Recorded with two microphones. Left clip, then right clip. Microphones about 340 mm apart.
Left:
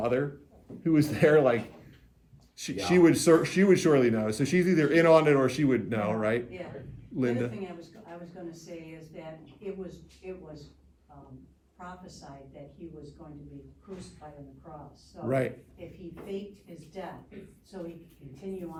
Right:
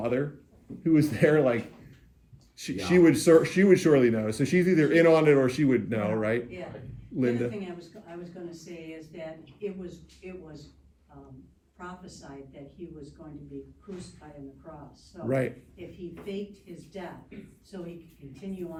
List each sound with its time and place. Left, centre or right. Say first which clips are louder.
0.9 s speech: even; centre
15.3 s speech: even; centre